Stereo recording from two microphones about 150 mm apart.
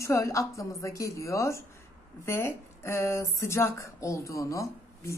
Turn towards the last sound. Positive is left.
turn(degrees=20)  # may be behind; listen again after turning